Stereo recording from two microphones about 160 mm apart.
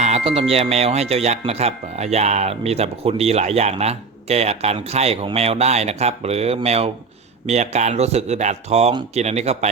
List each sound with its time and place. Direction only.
0.0 s speech: 40° right (ahead or behind)